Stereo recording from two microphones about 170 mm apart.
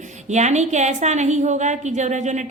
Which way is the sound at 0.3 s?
45° right (ahead or behind).